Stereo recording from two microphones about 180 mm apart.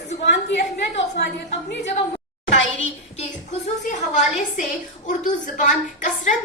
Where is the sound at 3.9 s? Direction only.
45° left (ahead or behind).